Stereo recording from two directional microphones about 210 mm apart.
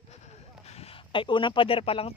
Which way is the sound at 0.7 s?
30° left (ahead or behind).